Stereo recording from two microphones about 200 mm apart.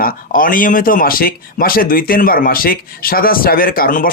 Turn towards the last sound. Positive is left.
turn(degrees=45)  # may be behind; listen again after turning